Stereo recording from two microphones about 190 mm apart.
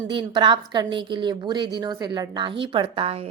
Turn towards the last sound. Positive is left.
turn(degrees=-30)  # may be behind; listen again after turning